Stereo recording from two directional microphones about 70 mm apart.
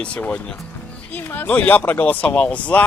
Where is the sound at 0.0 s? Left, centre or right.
Centre.